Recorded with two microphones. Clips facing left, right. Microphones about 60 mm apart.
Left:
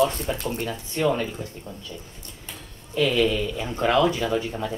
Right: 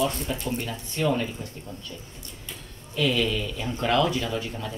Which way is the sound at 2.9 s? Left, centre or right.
Centre.